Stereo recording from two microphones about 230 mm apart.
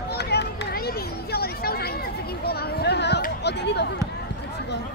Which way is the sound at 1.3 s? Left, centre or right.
Left.